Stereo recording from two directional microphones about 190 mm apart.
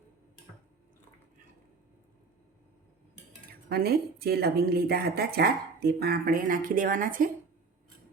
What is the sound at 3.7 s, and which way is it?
A woman's voice, 55° right (ahead or behind).